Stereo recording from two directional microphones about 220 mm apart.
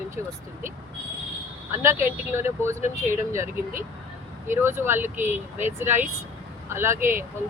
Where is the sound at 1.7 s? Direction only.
10° right (ahead or behind).